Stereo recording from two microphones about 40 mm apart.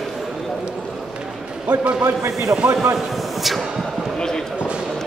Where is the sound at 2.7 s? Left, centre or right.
Centre.